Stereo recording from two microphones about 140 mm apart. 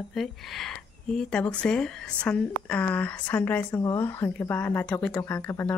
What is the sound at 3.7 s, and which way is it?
Speech, 20° left (ahead or behind).